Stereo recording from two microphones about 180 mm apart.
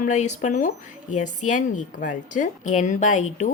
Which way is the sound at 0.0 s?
40° left (ahead or behind).